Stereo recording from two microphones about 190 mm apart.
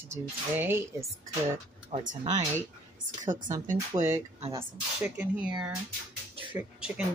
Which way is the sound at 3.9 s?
15° right (ahead or behind).